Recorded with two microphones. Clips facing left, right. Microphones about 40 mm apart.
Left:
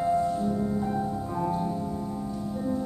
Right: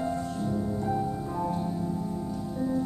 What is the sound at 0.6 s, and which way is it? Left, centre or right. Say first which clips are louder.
Music: left 1 dB; centre.